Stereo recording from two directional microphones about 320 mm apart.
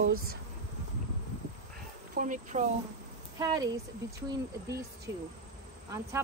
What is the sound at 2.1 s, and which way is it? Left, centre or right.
Speech, right.